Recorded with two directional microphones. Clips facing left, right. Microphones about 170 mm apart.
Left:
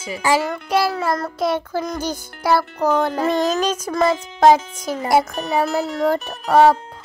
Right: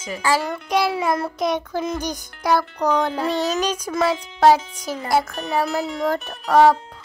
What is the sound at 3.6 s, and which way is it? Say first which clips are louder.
Child singing: left 2 dB; 5° right (ahead or behind).